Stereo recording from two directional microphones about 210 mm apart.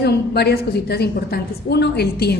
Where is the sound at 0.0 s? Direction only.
50° left (ahead or behind).